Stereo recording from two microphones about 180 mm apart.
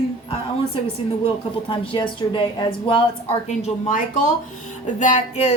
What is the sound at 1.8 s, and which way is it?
Speech, 30° left (ahead or behind).